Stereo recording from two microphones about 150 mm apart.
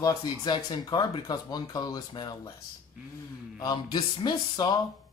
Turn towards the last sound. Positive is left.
turn(degrees=30)  # may be behind; listen again after turning